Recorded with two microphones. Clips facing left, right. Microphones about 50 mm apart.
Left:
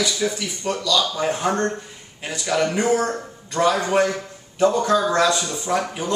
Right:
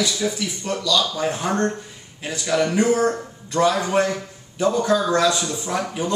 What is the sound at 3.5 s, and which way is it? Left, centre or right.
Speech, centre.